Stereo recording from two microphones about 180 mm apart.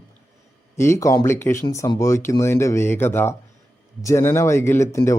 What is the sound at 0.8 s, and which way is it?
Speech, 15° left (ahead or behind).